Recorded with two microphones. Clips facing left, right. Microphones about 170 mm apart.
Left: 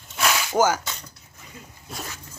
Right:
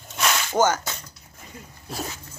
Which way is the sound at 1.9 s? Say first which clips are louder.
Right 4 dB; 30° right (ahead or behind).